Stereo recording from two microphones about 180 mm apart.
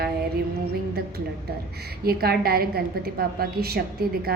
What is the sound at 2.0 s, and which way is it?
A woman's voice, 55° right (ahead or behind).